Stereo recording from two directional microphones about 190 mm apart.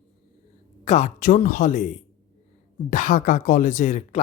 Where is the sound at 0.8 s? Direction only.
40° left (ahead or behind).